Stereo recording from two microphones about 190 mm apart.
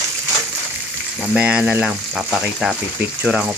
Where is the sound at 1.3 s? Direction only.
5° right (ahead or behind).